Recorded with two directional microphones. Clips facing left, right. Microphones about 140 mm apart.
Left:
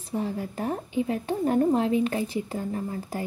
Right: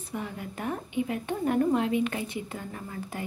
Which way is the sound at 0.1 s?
35° left (ahead or behind).